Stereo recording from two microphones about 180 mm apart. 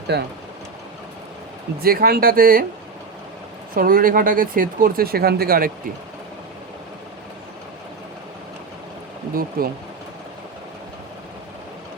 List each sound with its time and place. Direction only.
0.1 s speech: 60° right (ahead or behind)
1.8 s speech: 55° right (ahead or behind)
3.8 s speech: 50° right (ahead or behind)
9.6 s speech: 55° right (ahead or behind)